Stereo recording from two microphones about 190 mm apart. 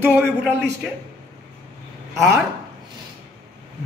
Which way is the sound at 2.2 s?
15° right (ahead or behind).